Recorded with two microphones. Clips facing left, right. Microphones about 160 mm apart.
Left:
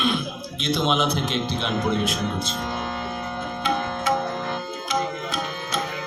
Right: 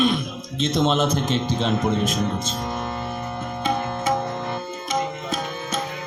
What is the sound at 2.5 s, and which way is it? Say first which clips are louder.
Mantra: right 1 dB; 10° right (ahead or behind).